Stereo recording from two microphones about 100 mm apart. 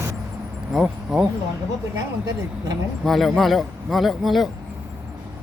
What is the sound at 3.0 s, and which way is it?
Speech, centre (ahead or behind).